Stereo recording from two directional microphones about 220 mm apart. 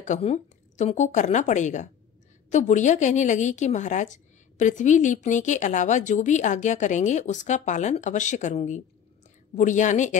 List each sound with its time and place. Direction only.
0.0 s a woman's voice: 30° left (ahead or behind)